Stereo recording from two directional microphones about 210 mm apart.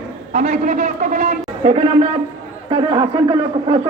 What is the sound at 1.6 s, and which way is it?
A man's voice, 25° right (ahead or behind).